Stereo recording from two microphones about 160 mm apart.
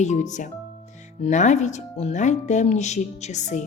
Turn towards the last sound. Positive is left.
turn(degrees=45)  # may be behind; listen again after turning